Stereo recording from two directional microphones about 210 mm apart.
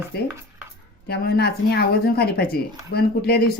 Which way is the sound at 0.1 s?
50° left (ahead or behind).